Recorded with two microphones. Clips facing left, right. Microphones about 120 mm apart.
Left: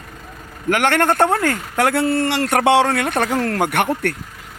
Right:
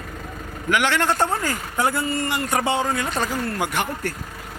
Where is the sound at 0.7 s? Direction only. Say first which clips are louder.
Left 4 dB; 50° left (ahead or behind); by 3.6 s 80° left.